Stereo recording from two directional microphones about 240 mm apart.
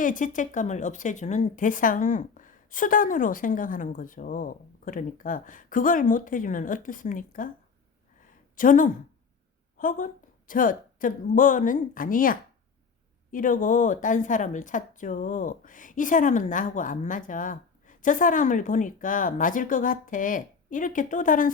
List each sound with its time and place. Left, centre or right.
0.0 s a woman's voice: left
8.5 s a woman's voice: left